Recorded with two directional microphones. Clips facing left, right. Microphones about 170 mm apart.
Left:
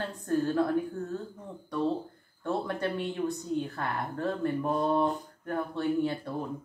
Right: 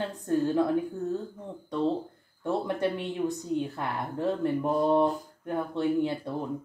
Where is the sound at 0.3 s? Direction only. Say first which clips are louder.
Right 2 dB; 20° right (ahead or behind).